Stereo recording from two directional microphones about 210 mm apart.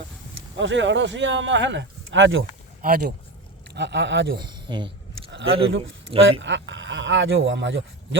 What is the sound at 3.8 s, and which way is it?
Speech, 55° right (ahead or behind).